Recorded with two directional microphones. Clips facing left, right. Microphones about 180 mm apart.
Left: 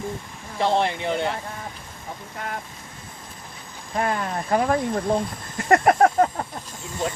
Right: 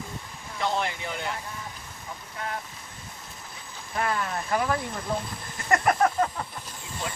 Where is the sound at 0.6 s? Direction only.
30° left (ahead or behind).